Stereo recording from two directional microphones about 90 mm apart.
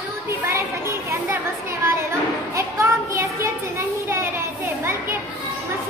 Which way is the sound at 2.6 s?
30° right (ahead or behind).